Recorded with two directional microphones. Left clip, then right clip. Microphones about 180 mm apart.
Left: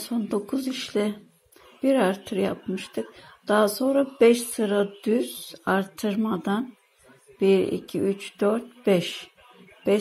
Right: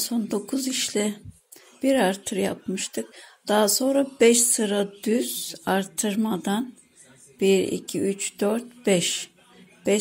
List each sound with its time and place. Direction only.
0.0 s speech: 35° right (ahead or behind)